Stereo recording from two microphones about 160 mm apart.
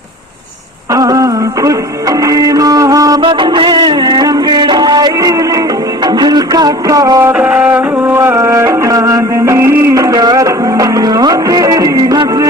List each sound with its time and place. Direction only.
0.9 s music: 20° right (ahead or behind)